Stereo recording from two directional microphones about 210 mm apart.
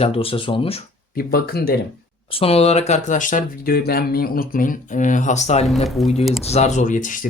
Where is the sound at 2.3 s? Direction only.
30° left (ahead or behind).